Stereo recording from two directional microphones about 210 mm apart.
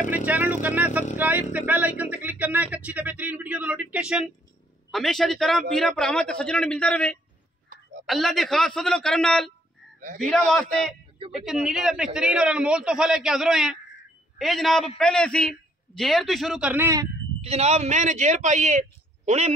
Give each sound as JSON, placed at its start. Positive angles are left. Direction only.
{"t": 0.1, "sound": "a man's voice", "side_deg": -10}
{"t": 9.9, "sound": "a man's voice", "side_deg": -35}
{"t": 10.5, "sound": "a man's voice", "side_deg": 0}
{"t": 17.4, "sound": "a man's voice", "side_deg": -30}